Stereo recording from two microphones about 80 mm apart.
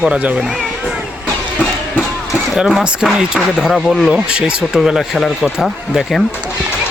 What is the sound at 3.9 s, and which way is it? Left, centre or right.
Speech, centre.